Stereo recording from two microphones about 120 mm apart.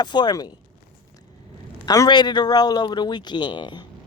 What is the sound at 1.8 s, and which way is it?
Speech, 30° left (ahead or behind).